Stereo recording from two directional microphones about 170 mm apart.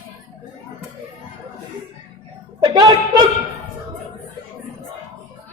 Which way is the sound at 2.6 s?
25° right (ahead or behind).